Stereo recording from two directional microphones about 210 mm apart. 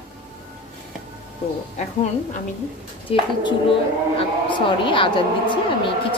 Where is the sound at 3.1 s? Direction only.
25° left (ahead or behind).